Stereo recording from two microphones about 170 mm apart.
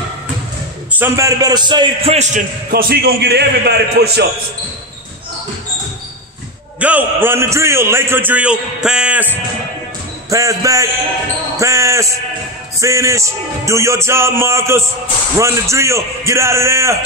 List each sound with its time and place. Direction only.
0.9 s a man's voice: 15° right (ahead or behind)
2.7 s a man's voice: 65° right (ahead or behind)
6.8 s a man's voice: 10° right (ahead or behind)